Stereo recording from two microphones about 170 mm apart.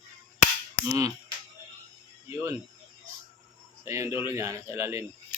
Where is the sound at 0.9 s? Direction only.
20° right (ahead or behind).